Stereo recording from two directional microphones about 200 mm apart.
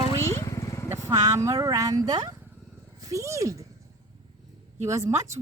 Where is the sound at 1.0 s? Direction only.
15° right (ahead or behind).